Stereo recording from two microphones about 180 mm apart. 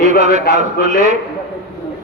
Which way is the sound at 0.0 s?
45° right (ahead or behind).